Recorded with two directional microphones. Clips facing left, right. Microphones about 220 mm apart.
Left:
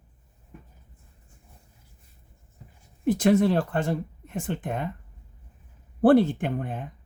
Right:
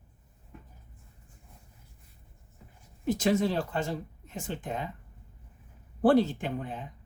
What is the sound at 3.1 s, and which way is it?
Speech, 55° left (ahead or behind).